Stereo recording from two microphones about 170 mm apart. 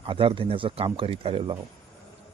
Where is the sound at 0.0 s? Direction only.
30° right (ahead or behind).